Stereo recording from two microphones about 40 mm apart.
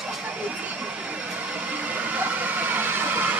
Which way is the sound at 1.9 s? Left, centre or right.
Right.